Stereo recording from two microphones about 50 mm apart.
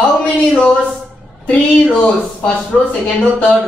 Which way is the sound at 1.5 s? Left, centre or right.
Left.